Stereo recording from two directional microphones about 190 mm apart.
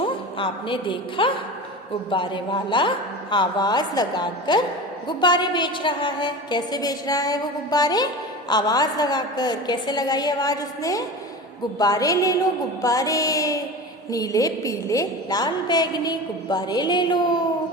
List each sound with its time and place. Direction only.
0.0 s a woman's voice: 25° left (ahead or behind)